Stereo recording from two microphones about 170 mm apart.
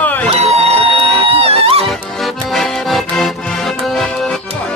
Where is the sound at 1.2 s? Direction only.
35° right (ahead or behind).